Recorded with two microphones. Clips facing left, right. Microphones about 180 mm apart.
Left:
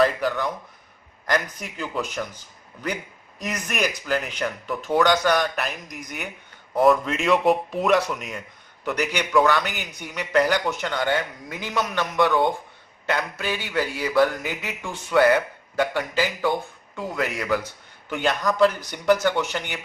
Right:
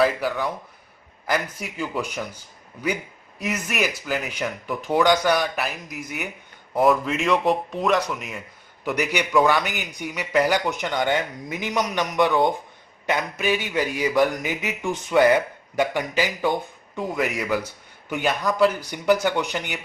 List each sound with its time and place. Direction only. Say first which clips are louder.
0.0 s speech: even; 10° right (ahead or behind)